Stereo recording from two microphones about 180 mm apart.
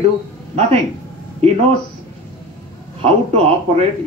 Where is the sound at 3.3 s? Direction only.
35° right (ahead or behind).